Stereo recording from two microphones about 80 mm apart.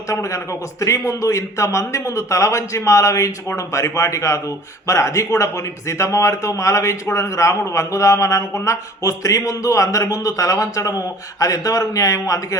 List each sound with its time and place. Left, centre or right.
0.1 s a man's voice: left